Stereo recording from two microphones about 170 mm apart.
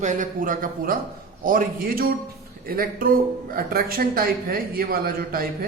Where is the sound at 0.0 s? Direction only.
45° right (ahead or behind).